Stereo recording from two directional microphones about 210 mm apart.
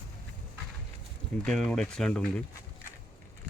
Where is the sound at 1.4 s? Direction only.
5° left (ahead or behind).